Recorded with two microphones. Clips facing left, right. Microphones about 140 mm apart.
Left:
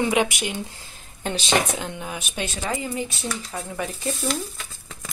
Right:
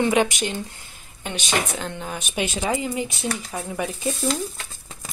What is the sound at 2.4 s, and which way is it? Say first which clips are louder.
Speech: right 4 dB; 15° right (ahead or behind).